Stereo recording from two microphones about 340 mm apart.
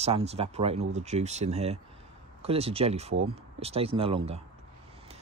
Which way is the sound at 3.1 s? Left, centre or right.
Right.